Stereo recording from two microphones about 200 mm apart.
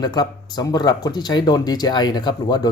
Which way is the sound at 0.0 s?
20° left (ahead or behind).